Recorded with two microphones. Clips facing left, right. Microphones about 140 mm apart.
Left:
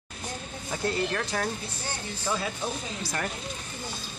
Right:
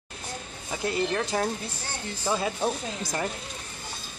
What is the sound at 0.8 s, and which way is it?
Speech, 20° right (ahead or behind).